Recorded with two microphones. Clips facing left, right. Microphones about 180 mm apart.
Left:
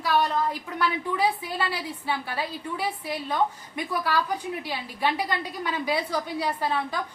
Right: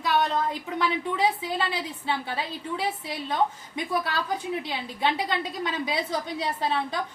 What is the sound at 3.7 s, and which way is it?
A woman's voice, 20° right (ahead or behind).